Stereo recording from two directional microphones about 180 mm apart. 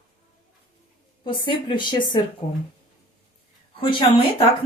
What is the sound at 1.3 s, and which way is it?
Speech, 30° left (ahead or behind).